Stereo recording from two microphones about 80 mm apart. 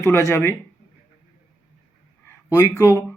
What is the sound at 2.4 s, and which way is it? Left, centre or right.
Speech, left.